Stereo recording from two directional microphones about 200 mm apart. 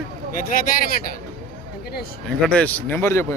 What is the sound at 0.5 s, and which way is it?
Speech, 45° left (ahead or behind).